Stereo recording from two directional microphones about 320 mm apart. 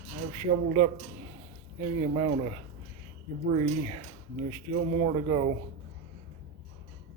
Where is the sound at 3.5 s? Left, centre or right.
Right.